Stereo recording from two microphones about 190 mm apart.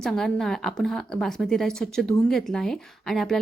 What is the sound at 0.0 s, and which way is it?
A woman's voice, centre (ahead or behind).